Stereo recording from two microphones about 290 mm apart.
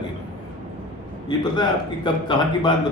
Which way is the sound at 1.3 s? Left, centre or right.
Centre.